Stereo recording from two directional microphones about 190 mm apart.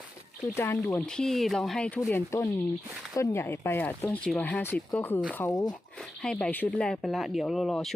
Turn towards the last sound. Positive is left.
turn(degrees=0)  # may be behind; listen again after turning